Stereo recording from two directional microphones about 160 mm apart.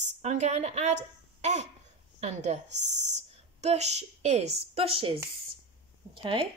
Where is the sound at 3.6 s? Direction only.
45° right (ahead or behind).